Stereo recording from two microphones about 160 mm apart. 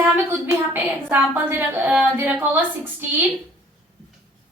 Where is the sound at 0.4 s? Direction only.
15° right (ahead or behind).